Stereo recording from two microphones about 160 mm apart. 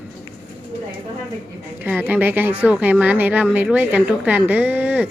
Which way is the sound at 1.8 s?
10° right (ahead or behind).